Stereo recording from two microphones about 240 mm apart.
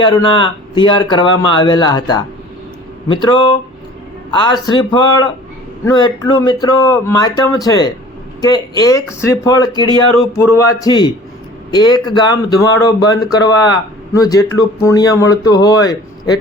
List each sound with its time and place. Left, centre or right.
0.0 s speech: centre